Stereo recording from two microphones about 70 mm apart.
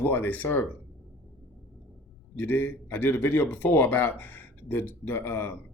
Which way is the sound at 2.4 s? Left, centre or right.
Left.